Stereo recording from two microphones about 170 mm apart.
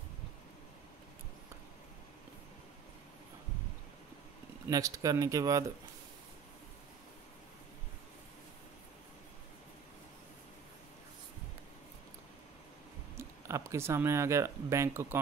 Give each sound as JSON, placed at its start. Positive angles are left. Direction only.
{"t": 4.6, "sound": "speech", "side_deg": -20}
{"t": 13.2, "sound": "speech", "side_deg": -15}